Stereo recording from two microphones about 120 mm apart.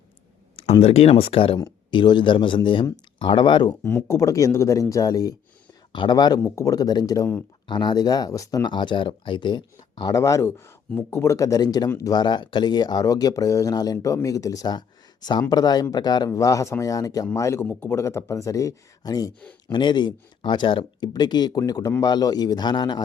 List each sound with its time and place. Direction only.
0.5 s speech: 55° left (ahead or behind)
1.9 s speech: 40° left (ahead or behind)
3.8 s speech: 20° left (ahead or behind); by 23.0 s 35° left (ahead or behind)